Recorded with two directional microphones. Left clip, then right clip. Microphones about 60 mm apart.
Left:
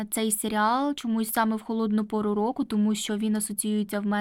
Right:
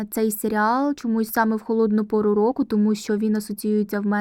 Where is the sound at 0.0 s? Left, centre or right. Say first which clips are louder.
Right 6 dB; right.